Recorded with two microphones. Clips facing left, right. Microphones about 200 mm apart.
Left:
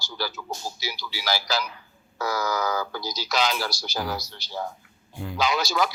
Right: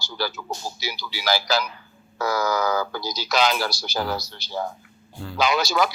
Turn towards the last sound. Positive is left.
turn(degrees=-65)  # may be behind; listen again after turning